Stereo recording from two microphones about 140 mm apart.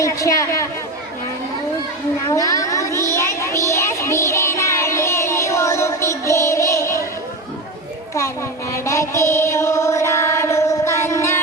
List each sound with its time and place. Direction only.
0.0 s a woman's voice: 25° left (ahead or behind)
2.2 s a sound: 25° left (ahead or behind)
8.7 s mantra: 20° left (ahead or behind)